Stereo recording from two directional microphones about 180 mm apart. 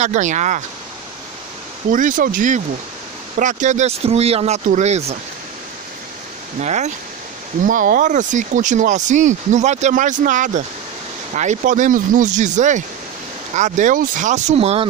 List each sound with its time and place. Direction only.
0.0 s speech: 40° right (ahead or behind)
1.9 s speech: 45° right (ahead or behind)
6.6 s speech: 40° right (ahead or behind)